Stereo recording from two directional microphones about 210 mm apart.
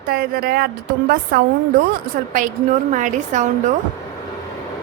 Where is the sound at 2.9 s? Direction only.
35° right (ahead or behind).